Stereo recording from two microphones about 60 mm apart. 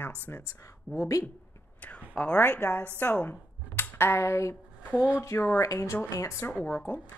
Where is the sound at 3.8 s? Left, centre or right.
Left.